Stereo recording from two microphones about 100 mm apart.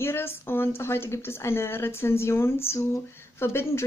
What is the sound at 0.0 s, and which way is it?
Speech, 25° left (ahead or behind).